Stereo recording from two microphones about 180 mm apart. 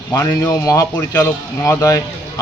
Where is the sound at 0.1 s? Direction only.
15° left (ahead or behind).